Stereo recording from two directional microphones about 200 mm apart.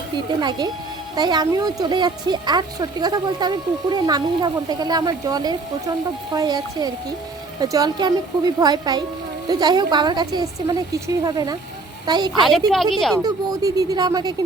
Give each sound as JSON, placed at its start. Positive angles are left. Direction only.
{"t": 1.1, "sound": "a woman's voice", "side_deg": -20}
{"t": 12.3, "sound": "speech", "side_deg": 0}
{"t": 13.2, "sound": "a woman's voice", "side_deg": -20}